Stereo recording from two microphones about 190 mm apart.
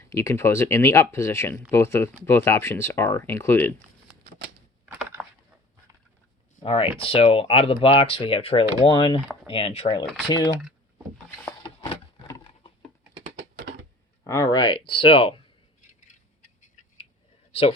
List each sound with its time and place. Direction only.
0.0 s speech: 15° left (ahead or behind)
6.6 s speech: 30° left (ahead or behind)
10.6 s power windows: 5° right (ahead or behind)
14.3 s speech: 20° left (ahead or behind)
17.5 s speech: 30° left (ahead or behind)